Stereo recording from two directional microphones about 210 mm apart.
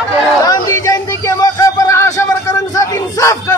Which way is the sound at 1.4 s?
15° left (ahead or behind).